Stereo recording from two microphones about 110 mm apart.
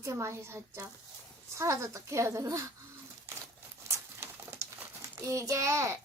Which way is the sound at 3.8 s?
25° right (ahead or behind).